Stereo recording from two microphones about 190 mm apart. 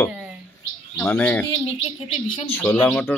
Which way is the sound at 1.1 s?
10° left (ahead or behind).